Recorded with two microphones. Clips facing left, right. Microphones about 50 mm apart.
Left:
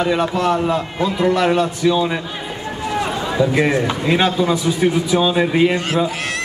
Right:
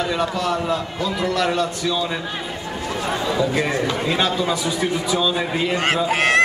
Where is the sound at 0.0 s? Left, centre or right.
Centre.